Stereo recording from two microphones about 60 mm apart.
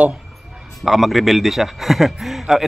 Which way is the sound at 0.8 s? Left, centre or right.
Centre.